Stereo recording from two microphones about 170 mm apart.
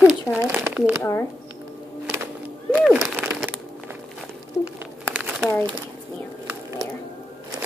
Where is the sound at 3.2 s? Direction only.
Centre (ahead or behind).